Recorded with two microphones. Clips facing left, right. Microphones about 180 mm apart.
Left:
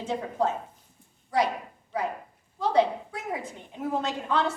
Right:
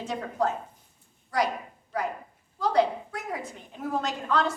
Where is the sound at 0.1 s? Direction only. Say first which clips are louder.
Left 1 dB; 25° left (ahead or behind).